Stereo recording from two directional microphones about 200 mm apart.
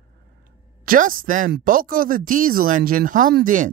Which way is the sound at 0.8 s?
45° right (ahead or behind).